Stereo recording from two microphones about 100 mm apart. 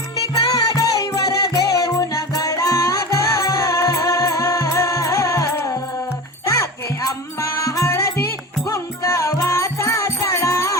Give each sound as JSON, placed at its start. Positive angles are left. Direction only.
{"t": 0.7, "sound": "music", "side_deg": 35}